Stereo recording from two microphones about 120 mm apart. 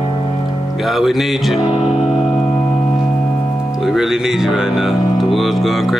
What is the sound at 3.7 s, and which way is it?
Speech, centre (ahead or behind).